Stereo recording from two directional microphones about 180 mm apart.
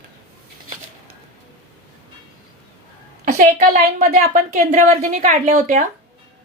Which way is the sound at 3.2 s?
45° right (ahead or behind).